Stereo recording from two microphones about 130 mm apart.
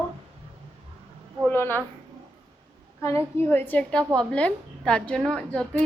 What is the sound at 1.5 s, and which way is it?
Speech, 20° left (ahead or behind).